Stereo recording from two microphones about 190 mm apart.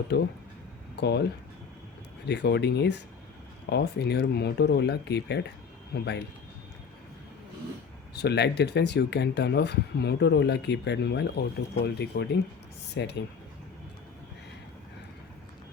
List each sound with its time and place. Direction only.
0.1 s speech: 60° left (ahead or behind)
8.1 s speech: 60° left (ahead or behind)